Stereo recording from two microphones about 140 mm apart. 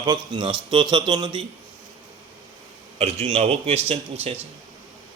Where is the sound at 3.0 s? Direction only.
45° right (ahead or behind).